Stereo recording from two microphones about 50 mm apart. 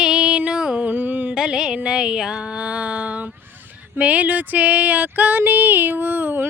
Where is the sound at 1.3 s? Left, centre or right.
Centre; by 3.3 s right.